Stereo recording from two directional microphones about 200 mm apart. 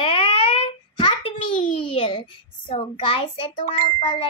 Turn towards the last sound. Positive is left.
turn(degrees=25)  # may be behind; listen again after turning